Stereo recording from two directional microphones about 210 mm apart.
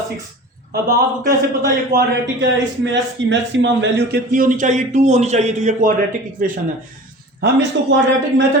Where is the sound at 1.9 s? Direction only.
50° right (ahead or behind); by 5.9 s 35° right (ahead or behind).